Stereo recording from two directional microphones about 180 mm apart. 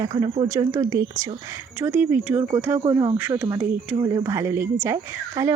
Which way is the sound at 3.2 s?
10° right (ahead or behind).